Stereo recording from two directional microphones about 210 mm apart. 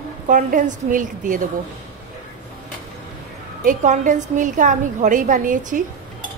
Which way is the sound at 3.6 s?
35° right (ahead or behind).